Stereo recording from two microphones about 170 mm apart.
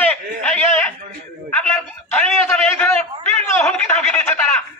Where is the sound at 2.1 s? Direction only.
10° left (ahead or behind).